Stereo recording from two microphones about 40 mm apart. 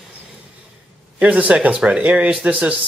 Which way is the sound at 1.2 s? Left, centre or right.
Right.